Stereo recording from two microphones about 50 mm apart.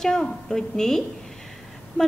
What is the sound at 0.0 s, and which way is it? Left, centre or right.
A woman's voice, centre.